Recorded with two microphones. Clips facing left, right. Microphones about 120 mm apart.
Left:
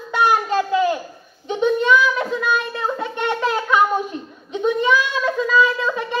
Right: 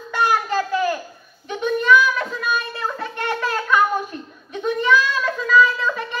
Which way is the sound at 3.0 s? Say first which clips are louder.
Left 2 dB; 20° left (ahead or behind).